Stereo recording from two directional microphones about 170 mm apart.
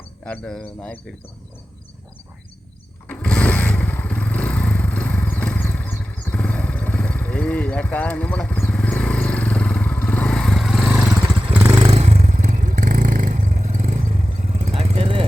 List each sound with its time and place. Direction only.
0.3 s speech: 5° left (ahead or behind)
3.1 s motorcycle: 5° left (ahead or behind)
11.2 s vehicle: 15° right (ahead or behind)
11.8 s vehicle: 35° right (ahead or behind)